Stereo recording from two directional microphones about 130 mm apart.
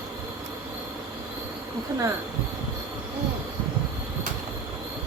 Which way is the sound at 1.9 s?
25° right (ahead or behind).